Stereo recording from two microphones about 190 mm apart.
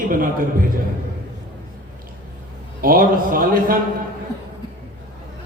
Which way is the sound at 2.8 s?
50° right (ahead or behind).